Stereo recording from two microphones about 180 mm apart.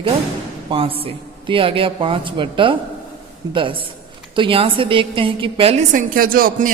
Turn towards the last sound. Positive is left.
turn(degrees=-50)  # may be behind; listen again after turning